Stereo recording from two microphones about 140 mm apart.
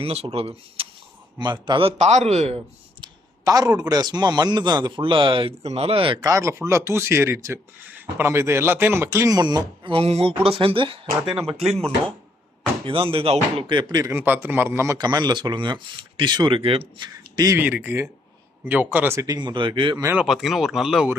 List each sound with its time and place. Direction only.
0.0 s a man's voice: 45° right (ahead or behind)
1.4 s a man's voice: 35° right (ahead or behind); by 2.6 s 50° right (ahead or behind)
3.0 s clicking: 25° right (ahead or behind)
3.8 s speech: 30° right (ahead or behind)
6.1 s speech: 25° right (ahead or behind)
9.9 s a man's voice: 45° right (ahead or behind)
12.8 s speech: 40° right (ahead or behind)
17.3 s speech: 25° right (ahead or behind)
17.6 s speech: 10° right (ahead or behind); by 20.0 s 35° right (ahead or behind)
20.1 s speech: 5° right (ahead or behind)